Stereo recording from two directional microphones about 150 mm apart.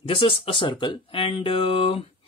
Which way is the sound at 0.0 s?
40° left (ahead or behind).